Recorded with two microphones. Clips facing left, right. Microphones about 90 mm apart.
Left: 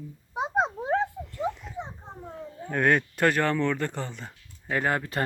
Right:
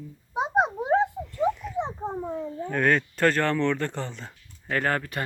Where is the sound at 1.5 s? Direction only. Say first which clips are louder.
Right 8 dB; 25° left (ahead or behind).